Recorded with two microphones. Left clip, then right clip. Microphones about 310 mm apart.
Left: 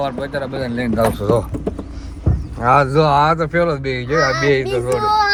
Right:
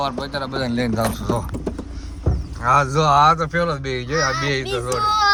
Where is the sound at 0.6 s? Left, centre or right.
Right.